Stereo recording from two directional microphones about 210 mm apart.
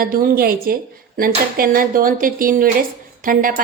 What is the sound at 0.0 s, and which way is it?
A woman's voice, 45° right (ahead or behind).